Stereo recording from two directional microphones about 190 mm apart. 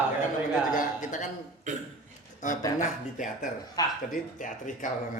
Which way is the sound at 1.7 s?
40° right (ahead or behind).